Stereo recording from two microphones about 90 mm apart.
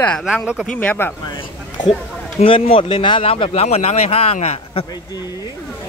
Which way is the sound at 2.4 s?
85° left.